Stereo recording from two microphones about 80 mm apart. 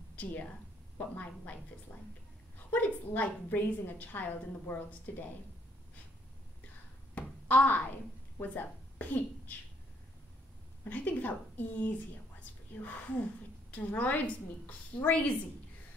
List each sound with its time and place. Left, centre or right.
0.1 s a woman's voice: left
2.7 s a woman's voice: left
7.2 s a sound: left
8.4 s a woman's voice: left
10.9 s a woman's voice: left
13.7 s a woman's voice: centre